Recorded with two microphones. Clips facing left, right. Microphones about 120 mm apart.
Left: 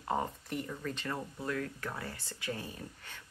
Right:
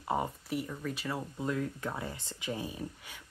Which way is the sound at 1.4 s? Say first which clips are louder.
Right 3 dB; 20° right (ahead or behind).